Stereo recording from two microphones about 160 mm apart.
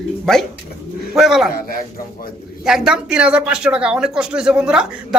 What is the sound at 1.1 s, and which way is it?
Speech, centre (ahead or behind).